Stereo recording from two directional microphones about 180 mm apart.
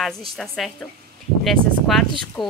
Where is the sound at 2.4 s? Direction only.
25° left (ahead or behind).